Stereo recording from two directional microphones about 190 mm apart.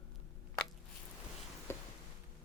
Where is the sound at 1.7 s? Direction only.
15° left (ahead or behind).